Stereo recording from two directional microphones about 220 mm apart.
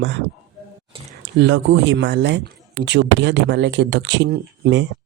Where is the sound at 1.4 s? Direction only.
55° right (ahead or behind).